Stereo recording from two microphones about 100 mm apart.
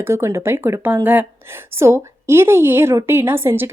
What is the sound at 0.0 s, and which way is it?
A woman's voice, 25° right (ahead or behind).